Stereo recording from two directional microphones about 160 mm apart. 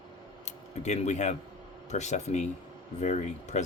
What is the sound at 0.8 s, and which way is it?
Speech, 45° left (ahead or behind).